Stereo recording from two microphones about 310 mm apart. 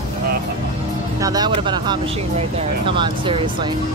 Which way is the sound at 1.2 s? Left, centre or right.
Centre.